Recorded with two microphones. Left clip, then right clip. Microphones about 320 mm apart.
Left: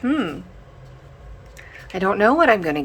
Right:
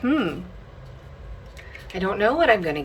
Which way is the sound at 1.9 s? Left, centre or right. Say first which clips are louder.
Left 5 dB; centre.